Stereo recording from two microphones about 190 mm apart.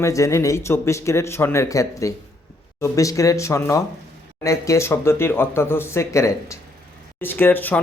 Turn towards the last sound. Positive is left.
turn(degrees=10)  # may be behind; listen again after turning